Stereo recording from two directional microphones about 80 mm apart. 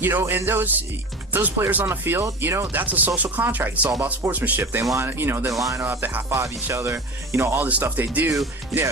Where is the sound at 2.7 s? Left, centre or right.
Right.